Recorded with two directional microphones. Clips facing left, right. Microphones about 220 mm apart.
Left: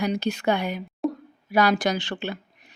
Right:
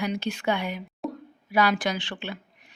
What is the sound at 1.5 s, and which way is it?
Speech, 40° left (ahead or behind).